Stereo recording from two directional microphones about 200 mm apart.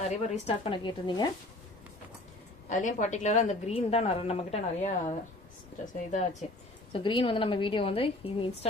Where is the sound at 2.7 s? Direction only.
40° left (ahead or behind).